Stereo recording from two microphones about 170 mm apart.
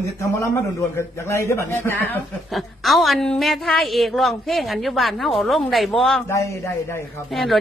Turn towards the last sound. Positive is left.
turn(degrees=0)  # may be behind; listen again after turning